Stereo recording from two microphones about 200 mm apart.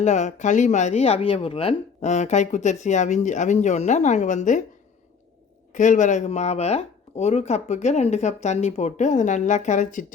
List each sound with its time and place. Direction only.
0.0 s speech: 35° left (ahead or behind)
5.7 s speech: 40° left (ahead or behind)